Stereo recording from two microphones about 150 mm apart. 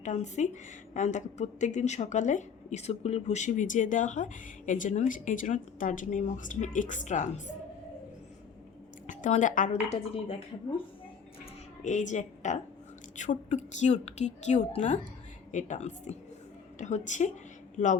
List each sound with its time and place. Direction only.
0.0 s a woman's voice: 50° left (ahead or behind)
9.0 s a woman's voice: 55° left (ahead or behind)
11.8 s a woman's voice: 55° left (ahead or behind)